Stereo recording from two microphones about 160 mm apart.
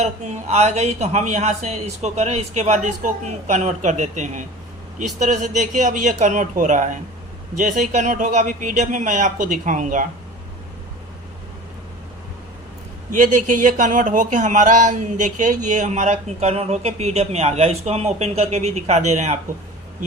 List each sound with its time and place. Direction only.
0.0 s speech: 45° right (ahead or behind)
13.1 s speech: 55° right (ahead or behind)